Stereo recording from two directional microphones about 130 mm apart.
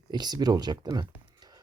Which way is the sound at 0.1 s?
30° right (ahead or behind).